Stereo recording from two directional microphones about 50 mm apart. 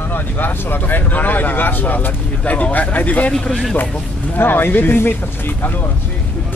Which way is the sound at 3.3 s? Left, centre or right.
Centre.